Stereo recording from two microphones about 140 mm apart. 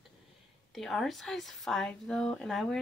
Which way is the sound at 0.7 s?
Centre (ahead or behind).